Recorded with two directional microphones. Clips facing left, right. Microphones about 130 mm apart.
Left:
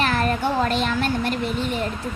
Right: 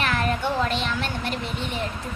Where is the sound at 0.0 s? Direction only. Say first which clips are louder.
Left 3 dB; 35° left (ahead or behind).